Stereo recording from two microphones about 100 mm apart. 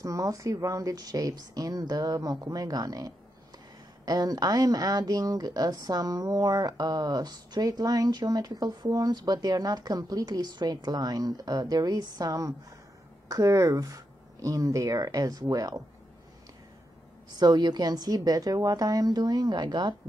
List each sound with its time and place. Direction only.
0.0 s speech: 35° right (ahead or behind)
17.3 s speech: 45° right (ahead or behind)